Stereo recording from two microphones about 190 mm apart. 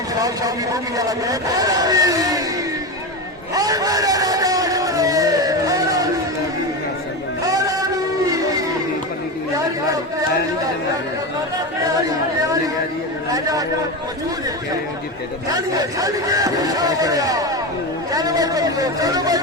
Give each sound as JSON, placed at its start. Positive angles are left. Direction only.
{"t": 0.2, "sound": "speech", "side_deg": -20}
{"t": 3.5, "sound": "a sound", "side_deg": -20}
{"t": 7.4, "sound": "music", "side_deg": -20}
{"t": 13.3, "sound": "chatter", "side_deg": -20}
{"t": 15.5, "sound": "speech", "side_deg": -20}